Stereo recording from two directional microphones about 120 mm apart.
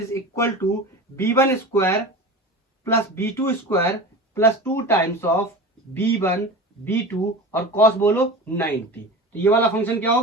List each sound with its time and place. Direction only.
0.1 s speech: 20° left (ahead or behind)